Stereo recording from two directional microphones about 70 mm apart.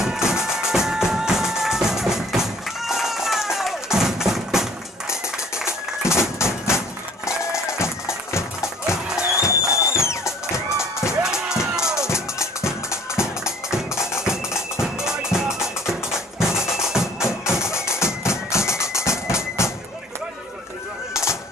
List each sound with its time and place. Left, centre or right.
0.0 s music: centre
5.7 s music: left
8.9 s music: centre
9.8 s music: left
11.1 s music: centre
12.9 s music: left
14.1 s music: centre
17.7 s music: left